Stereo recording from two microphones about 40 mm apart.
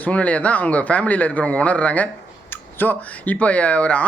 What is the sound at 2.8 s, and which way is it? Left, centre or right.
Speech, left.